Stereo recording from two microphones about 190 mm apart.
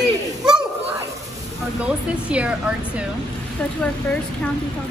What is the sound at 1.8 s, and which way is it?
Speech, 5° right (ahead or behind).